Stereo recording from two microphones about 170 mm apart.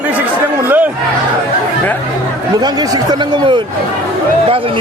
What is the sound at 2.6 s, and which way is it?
Speech, 25° right (ahead or behind).